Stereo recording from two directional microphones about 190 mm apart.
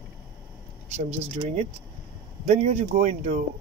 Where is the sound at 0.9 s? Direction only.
35° right (ahead or behind).